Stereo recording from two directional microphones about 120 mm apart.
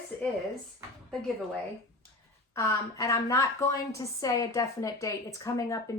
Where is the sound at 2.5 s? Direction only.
25° left (ahead or behind).